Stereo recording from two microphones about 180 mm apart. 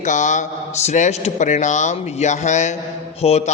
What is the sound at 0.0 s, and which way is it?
Mantra, 45° left (ahead or behind).